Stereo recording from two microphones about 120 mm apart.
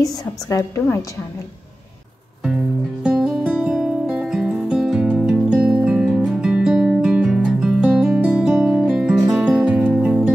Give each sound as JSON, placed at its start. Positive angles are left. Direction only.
{"t": 0.0, "sound": "a woman's voice", "side_deg": 30}
{"t": 3.0, "sound": "music", "side_deg": -5}